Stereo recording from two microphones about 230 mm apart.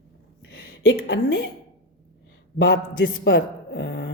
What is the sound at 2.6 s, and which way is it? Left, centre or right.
Speech, left.